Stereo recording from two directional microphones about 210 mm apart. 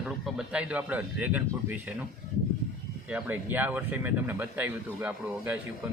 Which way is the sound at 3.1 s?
5° right (ahead or behind).